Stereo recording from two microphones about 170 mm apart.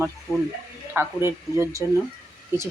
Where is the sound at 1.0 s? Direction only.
15° right (ahead or behind).